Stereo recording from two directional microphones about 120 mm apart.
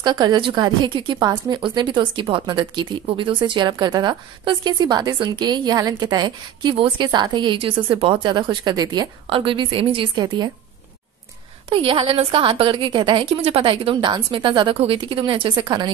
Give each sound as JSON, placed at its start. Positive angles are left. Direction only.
{"t": 0.0, "sound": "a woman's voice", "side_deg": -35}
{"t": 9.3, "sound": "a woman's voice", "side_deg": -45}
{"t": 11.7, "sound": "a woman's voice", "side_deg": -50}